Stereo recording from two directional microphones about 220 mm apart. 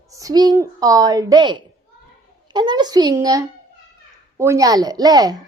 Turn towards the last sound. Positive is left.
turn(degrees=-15)  # may be behind; listen again after turning